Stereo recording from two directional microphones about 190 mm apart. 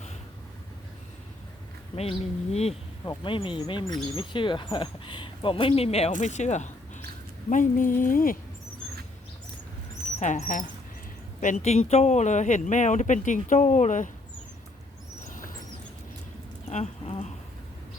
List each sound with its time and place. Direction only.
2.0 s speech: 35° left (ahead or behind)
10.2 s speech: 40° left (ahead or behind)
16.6 s a sound: 35° left (ahead or behind)